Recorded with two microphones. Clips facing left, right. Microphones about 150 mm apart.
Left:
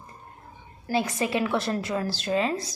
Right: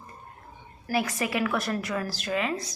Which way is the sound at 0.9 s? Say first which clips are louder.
Left 2 dB; 25° left (ahead or behind).